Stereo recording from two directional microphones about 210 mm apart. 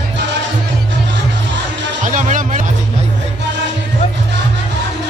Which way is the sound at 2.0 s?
35° right (ahead or behind).